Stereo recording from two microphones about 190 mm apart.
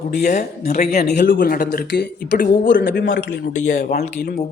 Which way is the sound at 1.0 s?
60° left (ahead or behind).